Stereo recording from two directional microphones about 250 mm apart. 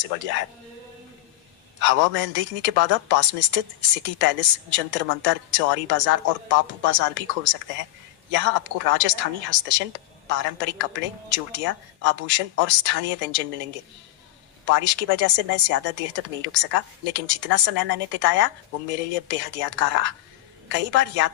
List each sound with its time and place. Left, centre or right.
1.8 s speech: right